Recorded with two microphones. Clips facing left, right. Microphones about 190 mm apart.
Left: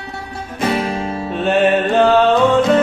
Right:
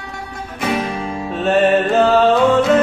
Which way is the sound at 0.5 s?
35° left (ahead or behind).